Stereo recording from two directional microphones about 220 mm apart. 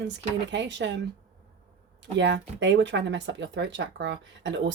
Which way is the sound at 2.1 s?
55° right (ahead or behind).